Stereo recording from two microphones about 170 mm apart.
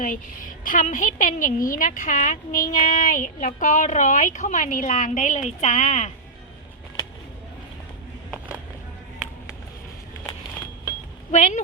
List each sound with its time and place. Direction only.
0.0 s a woman's voice: 50° left (ahead or behind)
8.3 s a sound: 5° right (ahead or behind)
11.3 s a woman's voice: 45° left (ahead or behind)